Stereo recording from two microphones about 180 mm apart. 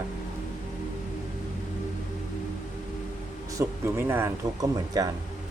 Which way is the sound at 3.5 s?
15° right (ahead or behind).